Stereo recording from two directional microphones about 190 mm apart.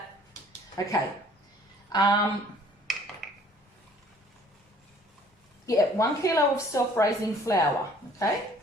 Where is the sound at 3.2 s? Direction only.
Centre (ahead or behind).